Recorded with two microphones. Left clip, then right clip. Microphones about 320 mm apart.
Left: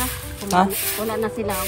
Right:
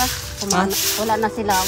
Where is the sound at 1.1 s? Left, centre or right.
Centre.